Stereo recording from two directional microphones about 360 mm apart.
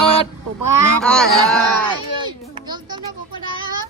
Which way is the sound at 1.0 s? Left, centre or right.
Centre.